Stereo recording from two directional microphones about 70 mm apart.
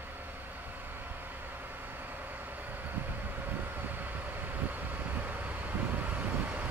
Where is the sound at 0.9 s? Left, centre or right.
Right.